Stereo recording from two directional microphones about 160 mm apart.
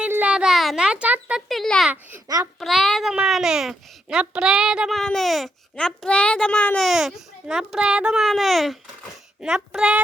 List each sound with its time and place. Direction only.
0.0 s a sound: 10° right (ahead or behind)
1.5 s a child's voice: centre (ahead or behind)
1.9 s a child's voice: 10° right (ahead or behind)
2.2 s a child's voice: 25° right (ahead or behind)
2.6 s a child's voice: centre (ahead or behind)